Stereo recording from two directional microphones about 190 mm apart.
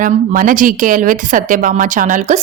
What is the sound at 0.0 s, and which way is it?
Speech, 45° right (ahead or behind).